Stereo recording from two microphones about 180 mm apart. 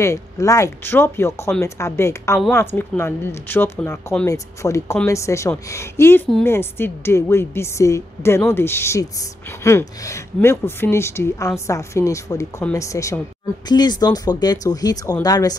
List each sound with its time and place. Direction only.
0.0 s speech: 15° left (ahead or behind)